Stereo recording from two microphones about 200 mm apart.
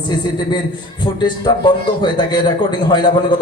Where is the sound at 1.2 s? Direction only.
20° left (ahead or behind).